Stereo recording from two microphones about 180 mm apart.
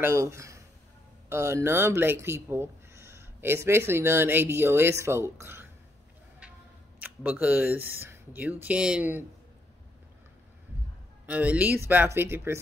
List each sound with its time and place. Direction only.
0.0 s speech: 15° right (ahead or behind)
7.0 s speech: 10° right (ahead or behind)
11.2 s speech: 10° right (ahead or behind)